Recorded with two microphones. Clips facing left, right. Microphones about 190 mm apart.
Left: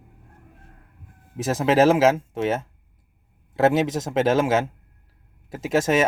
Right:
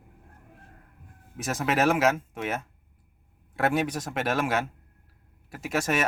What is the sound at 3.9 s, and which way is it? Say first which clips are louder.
Speech: left 8 dB; 25° left (ahead or behind).